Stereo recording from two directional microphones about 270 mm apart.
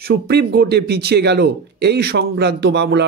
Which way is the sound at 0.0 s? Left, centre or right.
Right.